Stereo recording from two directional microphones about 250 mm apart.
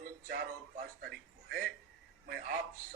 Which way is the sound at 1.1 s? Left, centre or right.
Right.